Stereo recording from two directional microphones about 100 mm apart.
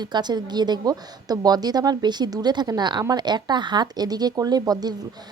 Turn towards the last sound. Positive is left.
turn(degrees=-40)  # may be behind; listen again after turning